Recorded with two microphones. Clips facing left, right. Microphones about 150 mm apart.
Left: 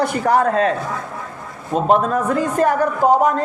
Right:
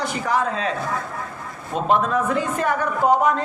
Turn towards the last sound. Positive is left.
turn(degrees=40)  # may be behind; listen again after turning